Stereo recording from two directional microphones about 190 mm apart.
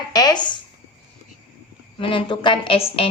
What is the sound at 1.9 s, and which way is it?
A woman's voice, 30° left (ahead or behind).